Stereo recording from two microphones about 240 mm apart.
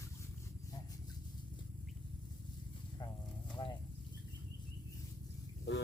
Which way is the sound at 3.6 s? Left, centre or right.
Centre.